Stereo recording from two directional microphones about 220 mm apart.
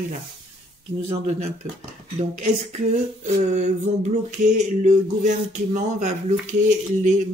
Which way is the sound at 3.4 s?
30° right (ahead or behind).